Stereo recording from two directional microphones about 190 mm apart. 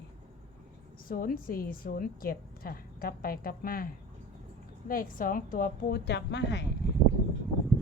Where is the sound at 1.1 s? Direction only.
50° left (ahead or behind); by 6.6 s 65° left (ahead or behind).